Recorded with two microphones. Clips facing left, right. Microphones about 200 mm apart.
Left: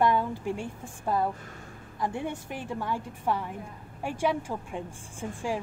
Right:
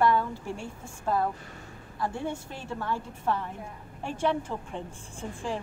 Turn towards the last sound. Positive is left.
turn(degrees=10)  # may be behind; listen again after turning